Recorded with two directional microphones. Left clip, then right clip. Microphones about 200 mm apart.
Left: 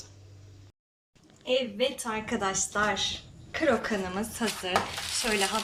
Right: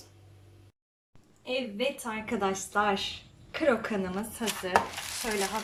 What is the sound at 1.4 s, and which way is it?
A woman's voice, centre (ahead or behind).